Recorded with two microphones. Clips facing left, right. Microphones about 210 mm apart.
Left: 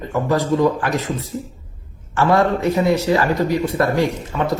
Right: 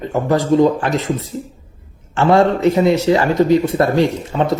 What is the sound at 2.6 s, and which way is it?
Speech, 25° right (ahead or behind).